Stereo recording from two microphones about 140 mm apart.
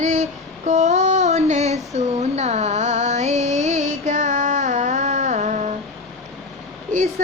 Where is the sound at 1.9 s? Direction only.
50° right (ahead or behind).